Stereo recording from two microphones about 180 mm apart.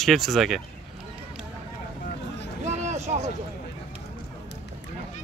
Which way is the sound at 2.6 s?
40° right (ahead or behind).